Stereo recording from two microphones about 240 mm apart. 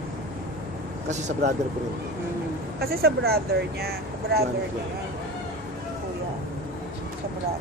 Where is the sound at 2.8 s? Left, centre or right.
Right.